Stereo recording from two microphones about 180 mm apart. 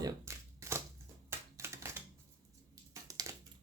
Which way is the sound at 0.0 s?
20° right (ahead or behind).